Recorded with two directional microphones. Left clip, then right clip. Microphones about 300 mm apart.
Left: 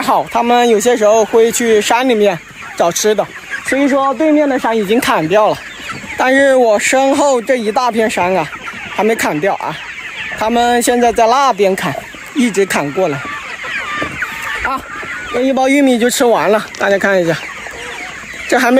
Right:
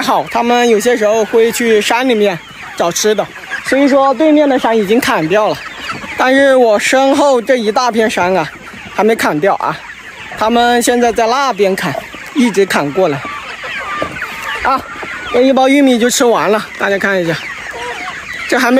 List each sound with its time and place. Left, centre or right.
0.0 s speech: centre
14.6 s speech: right
15.4 s speech: centre
18.5 s speech: centre